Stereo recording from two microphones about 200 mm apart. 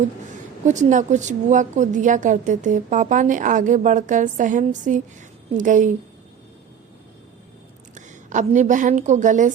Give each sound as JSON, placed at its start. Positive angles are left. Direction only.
{"t": 0.6, "sound": "a woman's voice", "side_deg": -35}
{"t": 7.9, "sound": "a woman's voice", "side_deg": -40}